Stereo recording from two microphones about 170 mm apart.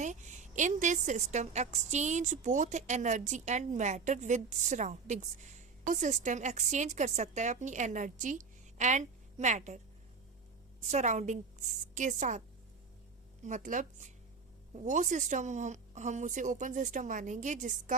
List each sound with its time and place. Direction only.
0.0 s a woman's voice: 45° right (ahead or behind)
10.8 s a woman's voice: 45° right (ahead or behind)
13.4 s a woman's voice: 45° right (ahead or behind)